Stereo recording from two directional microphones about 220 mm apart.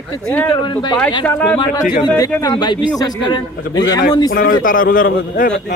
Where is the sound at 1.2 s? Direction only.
5° left (ahead or behind).